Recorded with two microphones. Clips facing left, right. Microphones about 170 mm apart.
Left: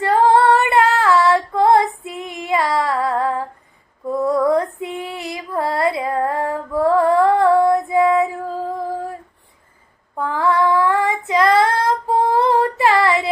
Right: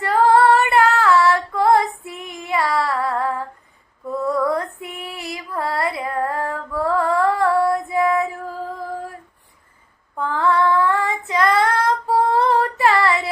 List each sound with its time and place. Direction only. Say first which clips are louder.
0.0 s female singing: left 1 dB; 20° left (ahead or behind)
10.2 s child singing: left 1 dB; 15° left (ahead or behind)